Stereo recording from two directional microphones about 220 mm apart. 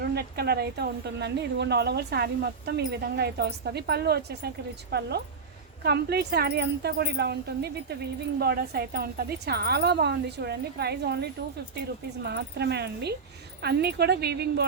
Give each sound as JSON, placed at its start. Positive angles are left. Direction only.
{"t": 0.0, "sound": "speech", "side_deg": -45}